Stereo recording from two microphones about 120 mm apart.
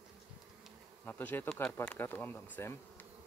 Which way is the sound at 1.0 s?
15° left (ahead or behind).